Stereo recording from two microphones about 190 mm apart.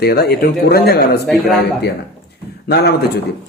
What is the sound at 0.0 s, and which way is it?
A man's voice, 55° left (ahead or behind).